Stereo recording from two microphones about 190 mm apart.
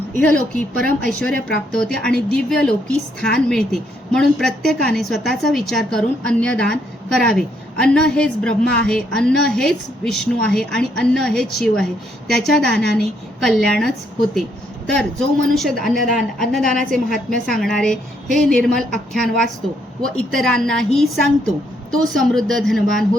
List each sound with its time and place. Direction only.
0.8 s a woman's voice: 5° left (ahead or behind)